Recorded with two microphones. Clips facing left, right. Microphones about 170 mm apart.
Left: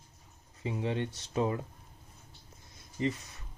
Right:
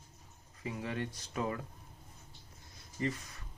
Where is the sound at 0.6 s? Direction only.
25° left (ahead or behind).